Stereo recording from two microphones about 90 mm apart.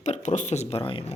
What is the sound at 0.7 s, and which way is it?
Speech, 85° left.